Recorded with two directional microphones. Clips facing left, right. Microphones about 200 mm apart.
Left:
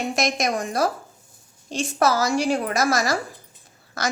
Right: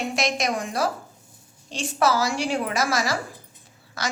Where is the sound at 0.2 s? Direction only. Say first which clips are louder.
Left 2 dB; 45° left (ahead or behind).